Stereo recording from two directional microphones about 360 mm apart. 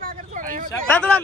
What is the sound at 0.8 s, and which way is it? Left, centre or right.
Speech, centre.